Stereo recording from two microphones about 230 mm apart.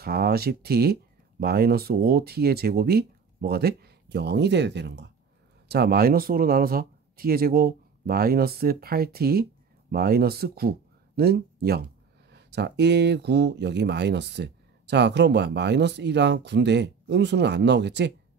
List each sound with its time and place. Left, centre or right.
0.0 s speech: right